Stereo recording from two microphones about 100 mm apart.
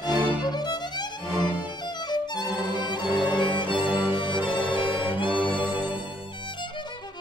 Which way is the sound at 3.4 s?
50° left (ahead or behind).